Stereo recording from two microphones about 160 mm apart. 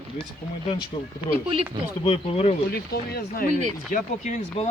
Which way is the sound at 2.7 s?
75° left (ahead or behind).